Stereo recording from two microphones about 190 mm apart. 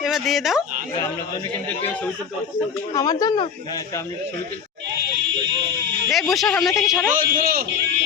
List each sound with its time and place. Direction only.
0.0 s speech: centre (ahead or behind)
2.9 s speech: 20° left (ahead or behind)
6.1 s speech: centre (ahead or behind)
7.2 s a man's voice: 50° right (ahead or behind)